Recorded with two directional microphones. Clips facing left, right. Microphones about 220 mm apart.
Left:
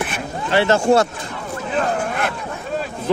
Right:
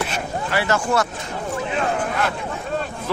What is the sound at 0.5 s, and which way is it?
Speech, 25° left (ahead or behind).